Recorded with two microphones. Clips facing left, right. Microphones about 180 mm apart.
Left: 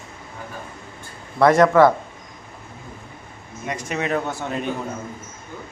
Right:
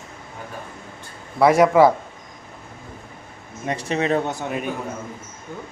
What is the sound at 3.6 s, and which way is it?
Speech, 30° right (ahead or behind).